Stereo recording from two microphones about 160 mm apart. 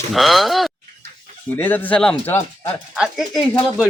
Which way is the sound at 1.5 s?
10° left (ahead or behind).